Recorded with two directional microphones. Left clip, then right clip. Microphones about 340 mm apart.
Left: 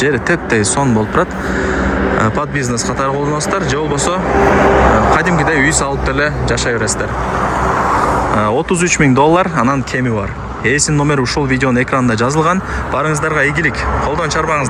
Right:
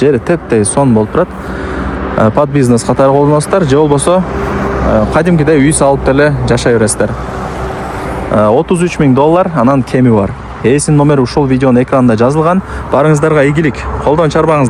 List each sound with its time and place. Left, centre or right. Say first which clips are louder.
0.0 s speech: right 4 dB; centre
4.4 s vehicle: left 5 dB; left
5.1 s speech: right 3 dB; centre
8.4 s speech: right 5 dB; centre; by 14.7 s right